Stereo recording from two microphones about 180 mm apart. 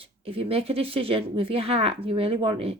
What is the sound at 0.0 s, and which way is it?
Speech, 30° right (ahead or behind).